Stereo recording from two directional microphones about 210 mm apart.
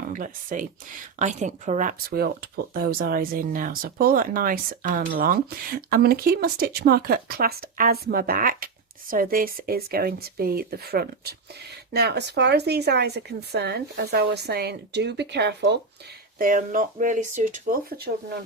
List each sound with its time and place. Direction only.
0.1 s speech: 40° right (ahead or behind); by 15.8 s 55° right (ahead or behind)
16.4 s speech: 40° right (ahead or behind)